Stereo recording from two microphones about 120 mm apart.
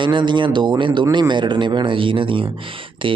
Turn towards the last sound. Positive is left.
turn(degrees=-45)  # may be behind; listen again after turning